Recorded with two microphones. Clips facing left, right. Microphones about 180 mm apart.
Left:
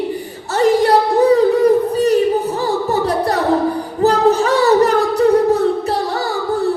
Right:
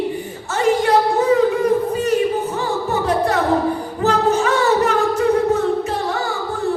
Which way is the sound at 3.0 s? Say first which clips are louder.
Left 1 dB; 35° left (ahead or behind).